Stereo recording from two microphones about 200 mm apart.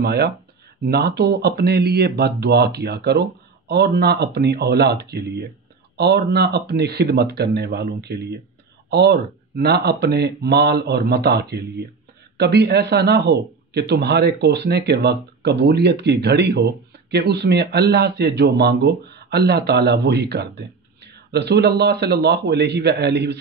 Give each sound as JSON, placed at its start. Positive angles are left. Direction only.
{"t": 0.0, "sound": "a man's voice", "side_deg": -55}